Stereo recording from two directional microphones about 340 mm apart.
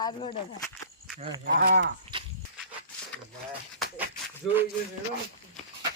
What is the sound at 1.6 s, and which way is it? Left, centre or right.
Speech, right.